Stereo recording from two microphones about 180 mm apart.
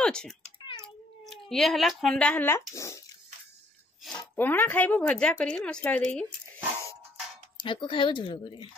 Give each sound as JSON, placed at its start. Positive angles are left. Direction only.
{"t": 0.0, "sound": "a woman's voice", "side_deg": 5}
{"t": 4.0, "sound": "a woman's voice", "side_deg": 5}
{"t": 7.5, "sound": "speech", "side_deg": 25}